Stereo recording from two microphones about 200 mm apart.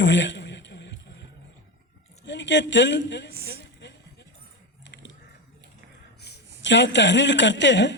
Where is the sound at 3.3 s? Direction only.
50° right (ahead or behind).